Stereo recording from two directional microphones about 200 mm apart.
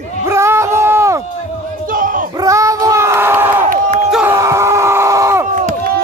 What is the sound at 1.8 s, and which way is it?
Crowd, 45° right (ahead or behind).